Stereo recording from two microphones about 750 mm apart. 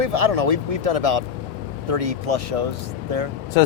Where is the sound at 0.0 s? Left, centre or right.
Right.